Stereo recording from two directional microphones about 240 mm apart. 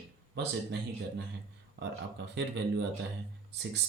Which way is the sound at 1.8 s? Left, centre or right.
Right.